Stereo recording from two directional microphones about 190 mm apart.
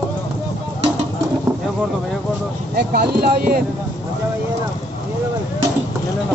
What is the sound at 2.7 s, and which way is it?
Speech, 55° right (ahead or behind).